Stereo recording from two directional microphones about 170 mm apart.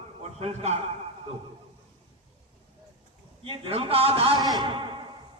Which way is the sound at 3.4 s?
35° right (ahead or behind).